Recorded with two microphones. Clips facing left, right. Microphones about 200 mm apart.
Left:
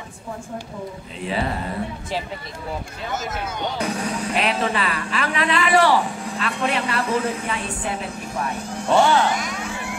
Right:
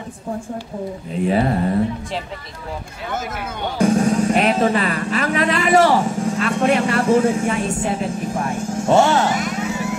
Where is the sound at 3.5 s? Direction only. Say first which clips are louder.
Right 10 dB; 50° right (ahead or behind).